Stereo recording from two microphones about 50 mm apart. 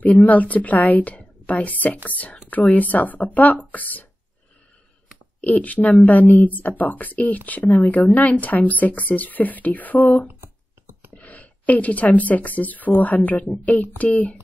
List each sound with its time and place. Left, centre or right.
0.0 s speech: left
5.4 s a woman's voice: left